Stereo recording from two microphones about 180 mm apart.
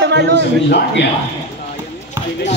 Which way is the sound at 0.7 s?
65° left (ahead or behind).